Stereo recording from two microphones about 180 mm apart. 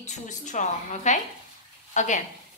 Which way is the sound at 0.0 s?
40° left (ahead or behind).